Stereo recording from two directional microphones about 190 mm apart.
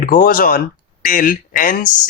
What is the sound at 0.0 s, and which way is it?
Speech, 45° left (ahead or behind).